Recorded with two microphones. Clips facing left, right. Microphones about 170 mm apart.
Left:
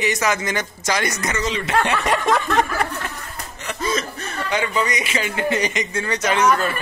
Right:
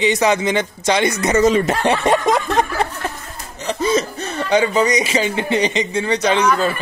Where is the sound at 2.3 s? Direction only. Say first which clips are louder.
Right 2 dB; 15° right (ahead or behind).